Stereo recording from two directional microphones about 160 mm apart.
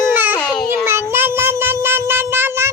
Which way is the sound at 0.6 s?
15° right (ahead or behind).